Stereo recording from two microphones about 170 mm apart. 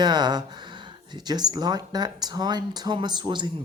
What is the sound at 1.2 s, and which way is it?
Speech, 25° right (ahead or behind).